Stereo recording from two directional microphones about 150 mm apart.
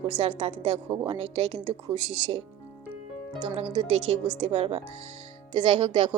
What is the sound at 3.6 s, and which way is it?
A woman's voice, 45° right (ahead or behind).